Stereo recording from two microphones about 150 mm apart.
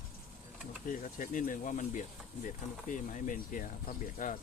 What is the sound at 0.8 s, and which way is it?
Speech, 60° left (ahead or behind).